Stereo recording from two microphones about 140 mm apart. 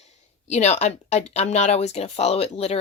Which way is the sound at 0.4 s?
50° left (ahead or behind).